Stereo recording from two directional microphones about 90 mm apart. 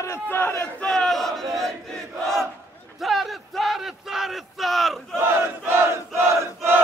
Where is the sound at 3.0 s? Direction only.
Centre (ahead or behind).